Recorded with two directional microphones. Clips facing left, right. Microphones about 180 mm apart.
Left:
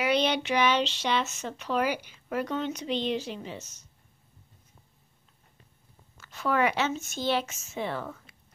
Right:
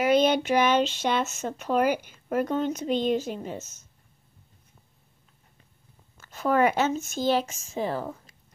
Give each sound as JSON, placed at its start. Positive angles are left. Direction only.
{"t": 0.0, "sound": "speech", "side_deg": -45}
{"t": 6.2, "sound": "speech", "side_deg": -45}